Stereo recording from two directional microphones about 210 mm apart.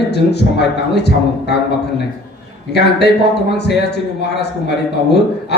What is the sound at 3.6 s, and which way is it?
Speech, 50° left (ahead or behind).